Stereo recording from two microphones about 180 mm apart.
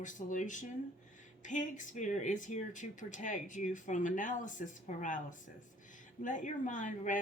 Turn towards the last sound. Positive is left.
turn(degrees=45)  # may be behind; listen again after turning